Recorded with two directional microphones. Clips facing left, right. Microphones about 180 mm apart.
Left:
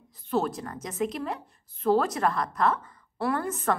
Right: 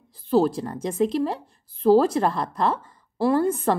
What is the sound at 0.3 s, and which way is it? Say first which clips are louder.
Speech: right 7 dB; 30° right (ahead or behind).